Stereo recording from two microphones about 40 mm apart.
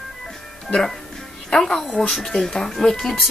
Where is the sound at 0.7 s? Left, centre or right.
Centre.